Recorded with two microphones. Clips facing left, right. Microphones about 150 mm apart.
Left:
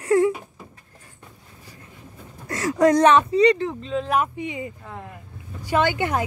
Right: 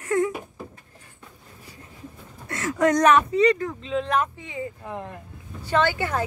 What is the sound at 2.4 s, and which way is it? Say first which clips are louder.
Speech: left 4 dB; 35° left (ahead or behind).